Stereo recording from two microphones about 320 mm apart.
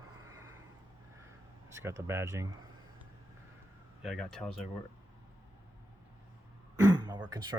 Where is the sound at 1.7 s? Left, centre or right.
Centre.